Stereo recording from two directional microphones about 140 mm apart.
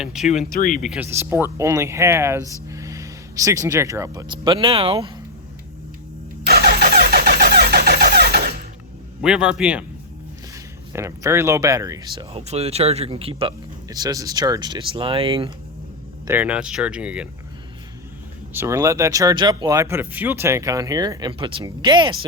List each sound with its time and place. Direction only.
0.0 s speech: 5° right (ahead or behind)
0.5 s speech: 70° left (ahead or behind)
0.8 s speech: 5° right (ahead or behind)
1.1 s speech: 15° right (ahead or behind); by 5.1 s 40° right (ahead or behind)
6.5 s vehicle: 90° right
9.2 s speech: 5° right (ahead or behind)
10.9 s speech: 20° right (ahead or behind)
12.1 s speech: 45° right (ahead or behind)
13.9 s speech: 25° right (ahead or behind)
16.2 s speech: 15° right (ahead or behind)
18.5 s speech: 20° right (ahead or behind)